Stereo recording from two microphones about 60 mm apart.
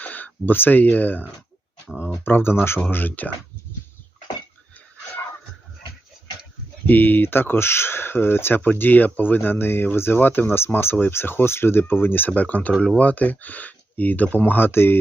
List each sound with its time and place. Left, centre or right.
0.0 s speech: left
2.2 s speech: left
6.8 s speech: left